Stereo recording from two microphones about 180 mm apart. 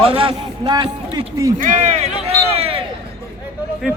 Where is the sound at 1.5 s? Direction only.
45° right (ahead or behind).